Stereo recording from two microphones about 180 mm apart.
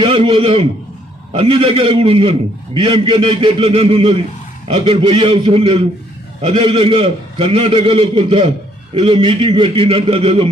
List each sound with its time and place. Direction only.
0.0 s a man's voice: 30° right (ahead or behind)